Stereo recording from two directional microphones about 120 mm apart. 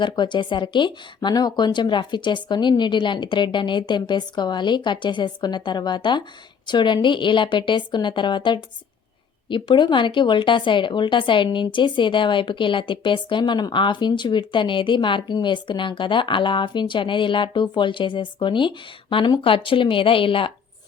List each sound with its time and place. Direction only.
0.0 s a woman's voice: 40° left (ahead or behind)